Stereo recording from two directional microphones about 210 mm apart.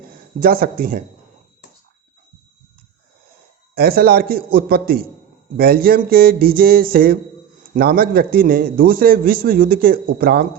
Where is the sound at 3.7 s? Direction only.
45° right (ahead or behind).